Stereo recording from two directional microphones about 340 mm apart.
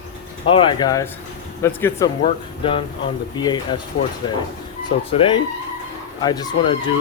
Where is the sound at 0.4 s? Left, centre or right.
Centre.